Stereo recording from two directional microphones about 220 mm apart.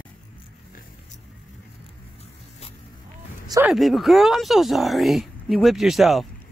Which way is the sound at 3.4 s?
15° right (ahead or behind).